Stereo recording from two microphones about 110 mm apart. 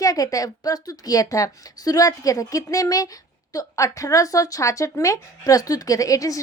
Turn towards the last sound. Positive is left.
turn(degrees=30)  # may be behind; listen again after turning